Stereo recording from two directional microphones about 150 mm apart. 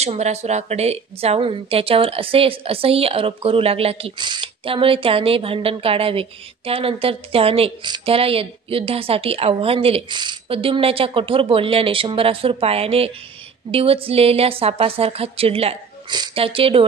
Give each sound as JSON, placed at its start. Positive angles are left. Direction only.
{"t": 0.0, "sound": "a woman's voice", "side_deg": -45}